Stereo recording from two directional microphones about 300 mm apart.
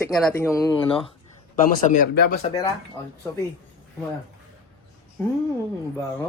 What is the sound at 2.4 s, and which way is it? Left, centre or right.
Speech, centre.